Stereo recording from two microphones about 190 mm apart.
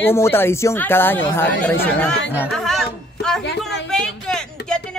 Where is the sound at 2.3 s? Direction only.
5° left (ahead or behind).